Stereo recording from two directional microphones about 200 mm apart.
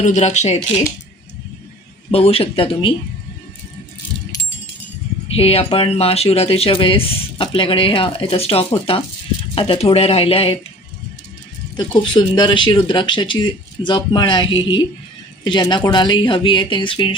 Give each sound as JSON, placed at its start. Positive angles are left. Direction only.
{"t": 0.0, "sound": "speech", "side_deg": 35}
{"t": 2.0, "sound": "speech", "side_deg": 30}
{"t": 5.3, "sound": "speech", "side_deg": 30}
{"t": 11.8, "sound": "speech", "side_deg": 20}